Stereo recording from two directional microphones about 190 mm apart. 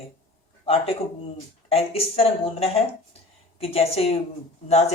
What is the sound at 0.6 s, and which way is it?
A man's voice, 30° left (ahead or behind).